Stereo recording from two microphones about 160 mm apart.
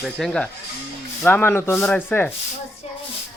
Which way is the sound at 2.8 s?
40° left (ahead or behind).